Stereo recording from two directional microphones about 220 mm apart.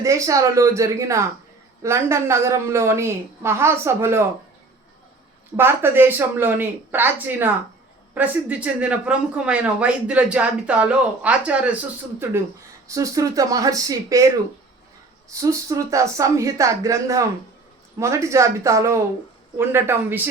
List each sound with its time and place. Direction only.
0.0 s a woman's voice: 15° right (ahead or behind)
5.5 s a woman's voice: 10° right (ahead or behind)